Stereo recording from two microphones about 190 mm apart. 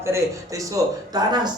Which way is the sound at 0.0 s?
15° right (ahead or behind).